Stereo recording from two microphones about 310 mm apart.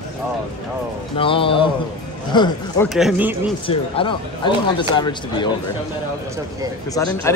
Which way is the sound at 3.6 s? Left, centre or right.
Centre.